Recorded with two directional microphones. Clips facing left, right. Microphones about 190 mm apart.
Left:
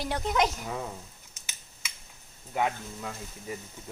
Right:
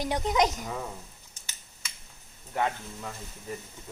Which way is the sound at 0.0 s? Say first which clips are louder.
Right 2 dB; 15° right (ahead or behind).